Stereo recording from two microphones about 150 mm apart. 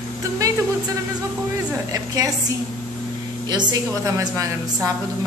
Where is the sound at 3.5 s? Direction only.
25° right (ahead or behind).